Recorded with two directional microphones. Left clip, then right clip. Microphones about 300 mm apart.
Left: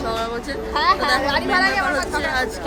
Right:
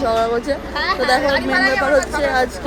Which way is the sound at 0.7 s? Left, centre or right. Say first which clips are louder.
Even; left.